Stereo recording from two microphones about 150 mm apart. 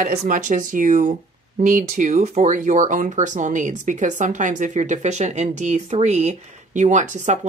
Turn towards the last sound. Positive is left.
turn(degrees=-55)  # may be behind; listen again after turning